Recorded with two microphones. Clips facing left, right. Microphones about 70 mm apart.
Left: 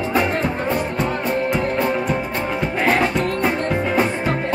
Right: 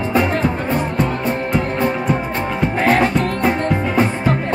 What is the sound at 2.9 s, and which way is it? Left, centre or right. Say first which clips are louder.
Music: right 3 dB; right.